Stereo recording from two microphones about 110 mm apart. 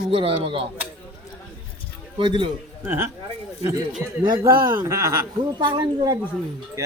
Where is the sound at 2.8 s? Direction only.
20° right (ahead or behind).